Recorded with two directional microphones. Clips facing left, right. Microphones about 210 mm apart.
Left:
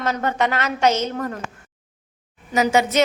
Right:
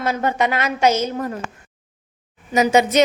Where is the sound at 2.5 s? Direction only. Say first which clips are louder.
Right 3 dB; 15° right (ahead or behind).